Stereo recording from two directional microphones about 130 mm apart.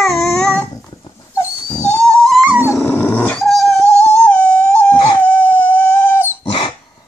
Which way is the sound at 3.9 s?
55° left (ahead or behind).